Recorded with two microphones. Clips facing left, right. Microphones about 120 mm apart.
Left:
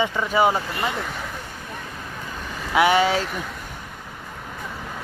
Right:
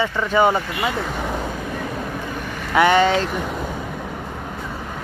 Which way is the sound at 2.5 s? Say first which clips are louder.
Right 2 dB; 15° left (ahead or behind).